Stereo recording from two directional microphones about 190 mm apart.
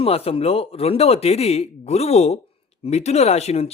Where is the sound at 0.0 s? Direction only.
30° left (ahead or behind).